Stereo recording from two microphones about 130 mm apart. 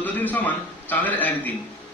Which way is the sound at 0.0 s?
15° left (ahead or behind).